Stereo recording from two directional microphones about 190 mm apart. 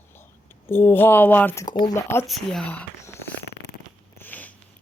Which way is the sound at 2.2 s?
Centre (ahead or behind).